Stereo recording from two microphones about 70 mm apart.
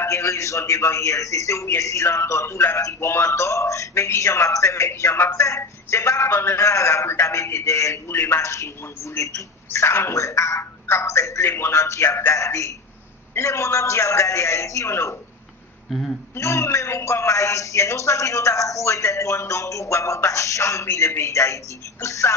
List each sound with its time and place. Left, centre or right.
0.0 s speech: left
11.4 s speech: left
16.3 s speech: left